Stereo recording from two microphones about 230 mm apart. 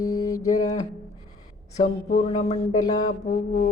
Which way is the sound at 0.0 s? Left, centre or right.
Centre.